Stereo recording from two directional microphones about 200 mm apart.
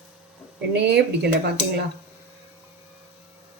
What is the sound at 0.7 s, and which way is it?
Speech, 55° right (ahead or behind).